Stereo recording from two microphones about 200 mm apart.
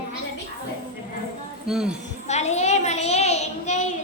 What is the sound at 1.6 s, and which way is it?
Speech, 5° right (ahead or behind).